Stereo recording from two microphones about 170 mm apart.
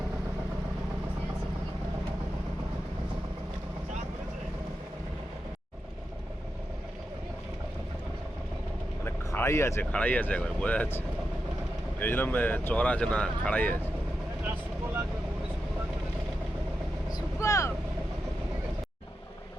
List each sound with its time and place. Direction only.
9.0 s speech: 15° left (ahead or behind)
17.1 s vehicle: 20° left (ahead or behind)